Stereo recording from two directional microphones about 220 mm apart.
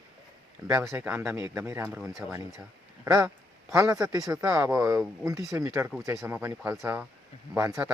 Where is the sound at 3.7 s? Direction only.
15° right (ahead or behind).